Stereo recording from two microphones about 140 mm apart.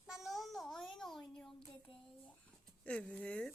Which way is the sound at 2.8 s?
10° left (ahead or behind).